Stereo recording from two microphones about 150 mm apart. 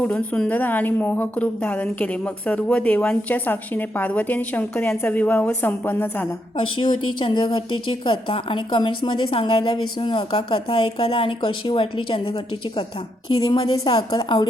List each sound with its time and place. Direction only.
0.0 s speech: 10° left (ahead or behind)
6.6 s a woman's voice: 35° left (ahead or behind)